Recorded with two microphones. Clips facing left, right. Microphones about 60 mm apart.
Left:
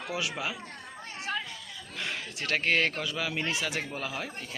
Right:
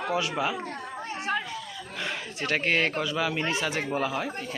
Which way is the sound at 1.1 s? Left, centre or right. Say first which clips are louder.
Right 5 dB; right.